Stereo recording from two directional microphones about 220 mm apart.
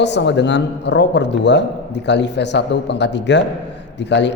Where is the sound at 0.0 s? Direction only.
50° left (ahead or behind).